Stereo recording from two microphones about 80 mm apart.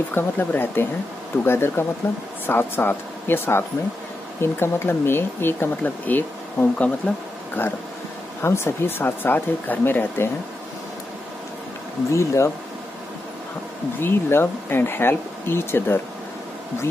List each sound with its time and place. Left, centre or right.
0.1 s speech: left
12.1 s speech: left
13.9 s speech: left